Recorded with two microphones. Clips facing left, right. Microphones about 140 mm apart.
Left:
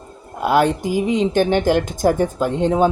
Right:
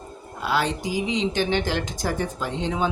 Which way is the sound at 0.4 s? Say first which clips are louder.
Left 8 dB; 50° left (ahead or behind).